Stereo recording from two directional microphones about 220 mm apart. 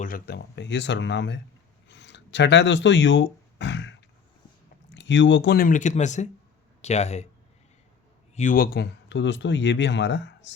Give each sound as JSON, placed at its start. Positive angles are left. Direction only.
{"t": 0.0, "sound": "speech", "side_deg": 45}
{"t": 1.9, "sound": "a sound", "side_deg": 55}
{"t": 4.9, "sound": "speech", "side_deg": 55}
{"t": 8.4, "sound": "speech", "side_deg": 40}